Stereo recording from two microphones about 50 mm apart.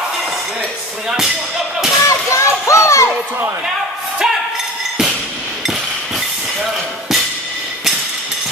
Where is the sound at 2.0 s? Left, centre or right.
Left.